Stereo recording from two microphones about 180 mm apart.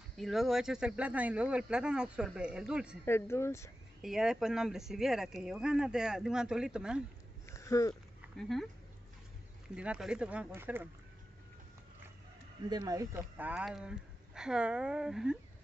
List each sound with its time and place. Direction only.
0.2 s speech: centre (ahead or behind)
3.1 s speech: 15° left (ahead or behind)
4.0 s speech: 5° right (ahead or behind)
7.4 s a sound: 15° left (ahead or behind)
8.4 s speech: centre (ahead or behind)
9.8 s speech: 5° right (ahead or behind)
12.6 s speech: 20° right (ahead or behind); by 15.3 s 5° right (ahead or behind)